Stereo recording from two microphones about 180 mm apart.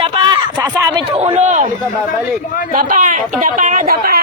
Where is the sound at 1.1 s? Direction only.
35° right (ahead or behind).